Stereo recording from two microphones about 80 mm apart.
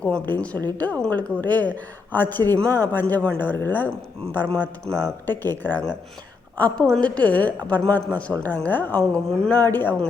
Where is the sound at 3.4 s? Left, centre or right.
Left.